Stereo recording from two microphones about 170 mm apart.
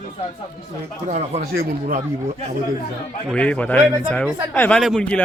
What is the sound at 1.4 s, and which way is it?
Speech, 65° right (ahead or behind).